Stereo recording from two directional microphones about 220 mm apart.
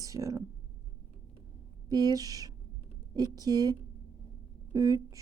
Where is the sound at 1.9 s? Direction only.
15° right (ahead or behind).